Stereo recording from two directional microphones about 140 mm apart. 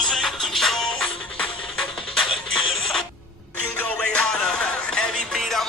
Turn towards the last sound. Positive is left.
turn(degrees=0)  # may be behind; listen again after turning